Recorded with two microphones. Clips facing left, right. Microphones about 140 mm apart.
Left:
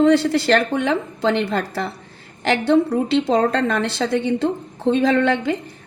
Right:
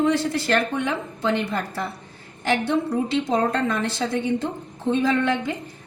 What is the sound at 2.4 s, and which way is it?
A woman's voice, 75° left (ahead or behind).